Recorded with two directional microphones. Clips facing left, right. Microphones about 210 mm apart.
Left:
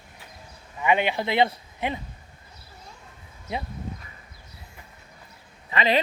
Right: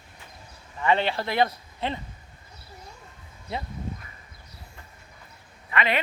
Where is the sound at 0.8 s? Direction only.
15° left (ahead or behind).